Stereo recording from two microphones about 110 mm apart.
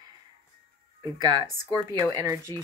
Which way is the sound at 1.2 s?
35° right (ahead or behind).